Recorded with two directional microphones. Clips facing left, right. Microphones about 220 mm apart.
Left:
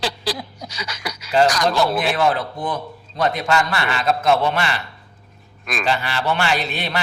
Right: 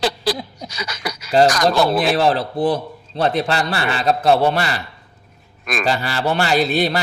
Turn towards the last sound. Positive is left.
turn(degrees=-40)  # may be behind; listen again after turning